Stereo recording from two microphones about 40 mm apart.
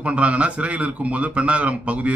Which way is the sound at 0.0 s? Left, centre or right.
Right.